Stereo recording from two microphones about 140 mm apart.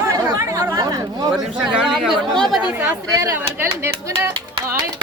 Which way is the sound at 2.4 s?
5° right (ahead or behind).